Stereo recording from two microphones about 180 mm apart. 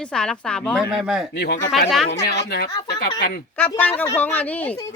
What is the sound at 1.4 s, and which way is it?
Speech, 65° left (ahead or behind).